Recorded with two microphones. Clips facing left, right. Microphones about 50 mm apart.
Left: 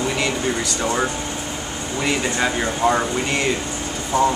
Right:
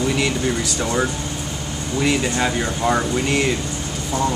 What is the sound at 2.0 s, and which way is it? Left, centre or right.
Speech, centre.